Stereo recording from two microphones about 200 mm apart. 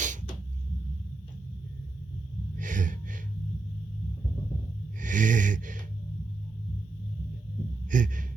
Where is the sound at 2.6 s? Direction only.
40° right (ahead or behind).